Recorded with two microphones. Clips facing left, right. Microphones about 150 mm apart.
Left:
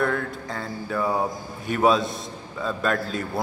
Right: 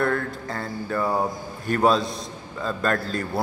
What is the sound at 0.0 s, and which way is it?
Music, centre (ahead or behind).